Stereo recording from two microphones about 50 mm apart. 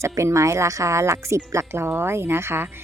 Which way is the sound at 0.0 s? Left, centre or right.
Right.